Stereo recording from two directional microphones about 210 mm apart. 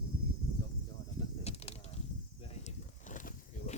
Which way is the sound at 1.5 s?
30° left (ahead or behind).